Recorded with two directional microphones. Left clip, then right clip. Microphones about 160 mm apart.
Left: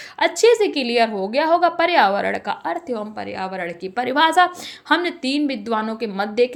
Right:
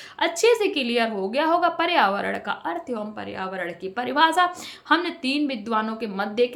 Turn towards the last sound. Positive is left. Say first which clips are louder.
# left 4 dB
turn(degrees=35)  # may be behind; listen again after turning